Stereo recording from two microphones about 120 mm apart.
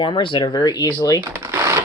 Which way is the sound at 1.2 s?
25° right (ahead or behind).